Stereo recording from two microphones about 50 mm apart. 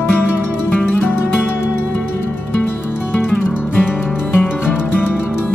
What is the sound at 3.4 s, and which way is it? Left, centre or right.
Music, left.